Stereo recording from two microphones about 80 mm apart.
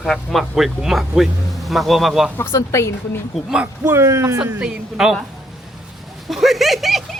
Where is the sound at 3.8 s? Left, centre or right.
Right.